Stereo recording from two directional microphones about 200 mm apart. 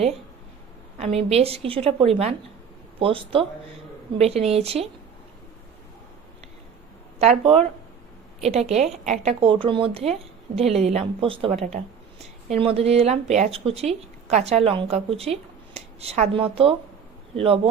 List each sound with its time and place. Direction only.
0.9 s speech: 30° right (ahead or behind)
7.2 s speech: 30° right (ahead or behind)